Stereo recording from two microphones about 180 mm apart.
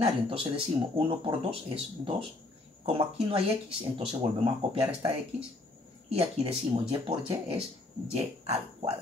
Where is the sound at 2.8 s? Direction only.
30° right (ahead or behind).